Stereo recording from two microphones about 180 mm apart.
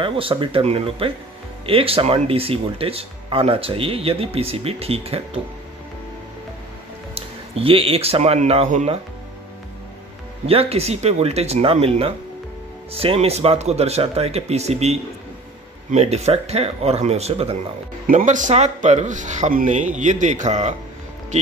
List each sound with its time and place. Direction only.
0.0 s speech: 30° right (ahead or behind)
7.2 s speech: 30° right (ahead or behind)
10.4 s speech: 35° right (ahead or behind)